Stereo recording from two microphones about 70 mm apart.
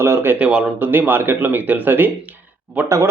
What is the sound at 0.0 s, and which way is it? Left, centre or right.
Speech, right.